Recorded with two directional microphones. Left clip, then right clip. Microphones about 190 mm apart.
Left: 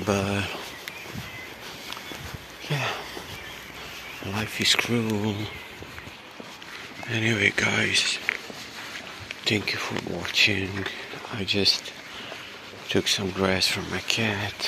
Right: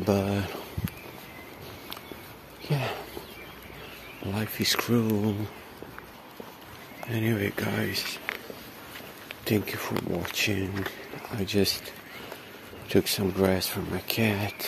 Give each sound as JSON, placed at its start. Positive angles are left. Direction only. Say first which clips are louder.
{"t": 0.1, "sound": "speech", "louder": "left 1 dB", "side_deg": -20}
{"t": 2.7, "sound": "a sound", "louder": "left 3 dB", "side_deg": -30}
{"t": 4.3, "sound": "speech", "louder": "left 5 dB", "side_deg": -30}
{"t": 7.1, "sound": "speech", "louder": "left 7 dB", "side_deg": -15}
{"t": 9.4, "sound": "speech", "louder": "left 4 dB", "side_deg": -35}
{"t": 9.8, "sound": "speech", "louder": "left 1 dB", "side_deg": -20}
{"t": 11.3, "sound": "speech", "louder": "left 4 dB", "side_deg": -35}
{"t": 12.8, "sound": "speech", "louder": "left 1 dB", "side_deg": -35}
{"t": 14.2, "sound": "speech", "louder": "left 1 dB", "side_deg": -50}